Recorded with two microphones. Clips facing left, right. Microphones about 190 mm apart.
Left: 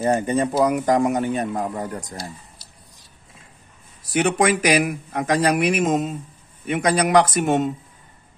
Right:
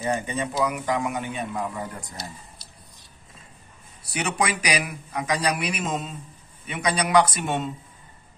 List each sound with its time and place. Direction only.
0.0 s speech: 45° left (ahead or behind)
4.1 s speech: 50° left (ahead or behind)